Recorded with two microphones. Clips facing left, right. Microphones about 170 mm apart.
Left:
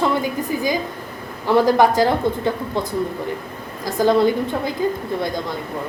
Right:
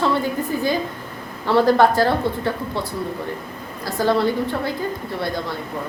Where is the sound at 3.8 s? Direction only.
15° left (ahead or behind).